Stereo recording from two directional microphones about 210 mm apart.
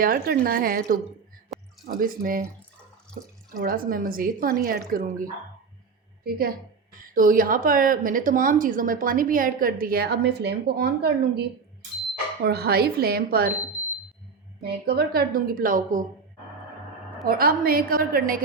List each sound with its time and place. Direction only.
0.0 s a woman's voice: 45° right (ahead or behind)
1.5 s a sound: centre (ahead or behind)
2.0 s a woman's voice: 40° right (ahead or behind)
3.6 s a woman's voice: 40° right (ahead or behind)
14.6 s a woman's voice: 50° right (ahead or behind)
17.2 s a woman's voice: 45° right (ahead or behind)